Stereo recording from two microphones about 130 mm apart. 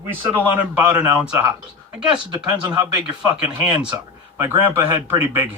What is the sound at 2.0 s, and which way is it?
Speech, 35° right (ahead or behind).